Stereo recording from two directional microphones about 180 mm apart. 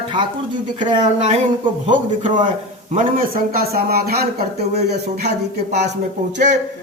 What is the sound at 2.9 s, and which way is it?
A man's voice, 50° right (ahead or behind).